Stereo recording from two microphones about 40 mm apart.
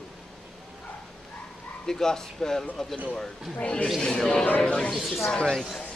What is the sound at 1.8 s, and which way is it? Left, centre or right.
Speech, centre.